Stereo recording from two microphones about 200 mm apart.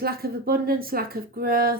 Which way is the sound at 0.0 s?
50° right (ahead or behind).